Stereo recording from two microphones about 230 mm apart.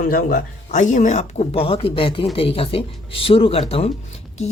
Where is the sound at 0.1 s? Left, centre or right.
Left.